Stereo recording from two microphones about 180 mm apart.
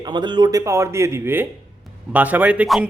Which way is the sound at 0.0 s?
25° right (ahead or behind).